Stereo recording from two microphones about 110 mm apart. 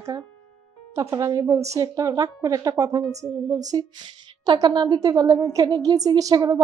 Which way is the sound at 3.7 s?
40° right (ahead or behind).